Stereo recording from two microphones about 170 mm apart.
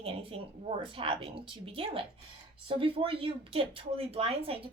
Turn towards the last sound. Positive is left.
turn(degrees=-35)  # may be behind; listen again after turning